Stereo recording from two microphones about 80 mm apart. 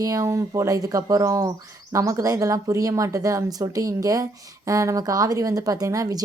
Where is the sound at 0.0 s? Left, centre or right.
Right.